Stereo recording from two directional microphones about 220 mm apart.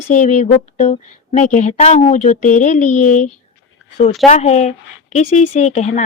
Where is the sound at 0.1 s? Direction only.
35° left (ahead or behind).